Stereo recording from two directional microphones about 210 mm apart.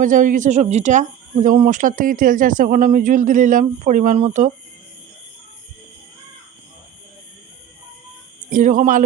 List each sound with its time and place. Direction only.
0.0 s speech: 40° right (ahead or behind)
8.4 s speech: 40° right (ahead or behind)